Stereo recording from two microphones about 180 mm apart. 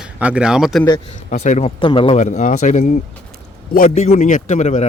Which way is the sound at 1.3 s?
40° left (ahead or behind).